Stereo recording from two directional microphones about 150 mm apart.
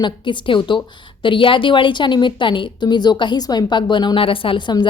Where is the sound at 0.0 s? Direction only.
30° left (ahead or behind).